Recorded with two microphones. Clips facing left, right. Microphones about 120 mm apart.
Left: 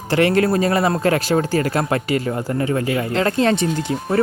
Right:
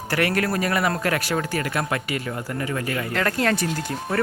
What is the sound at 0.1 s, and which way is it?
Speech, 25° left (ahead or behind).